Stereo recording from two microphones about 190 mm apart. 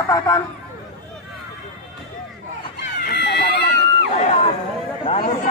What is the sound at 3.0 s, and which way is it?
Run, 60° left (ahead or behind).